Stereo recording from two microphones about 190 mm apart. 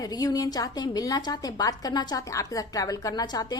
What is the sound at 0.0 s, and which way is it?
A woman's voice, 20° left (ahead or behind).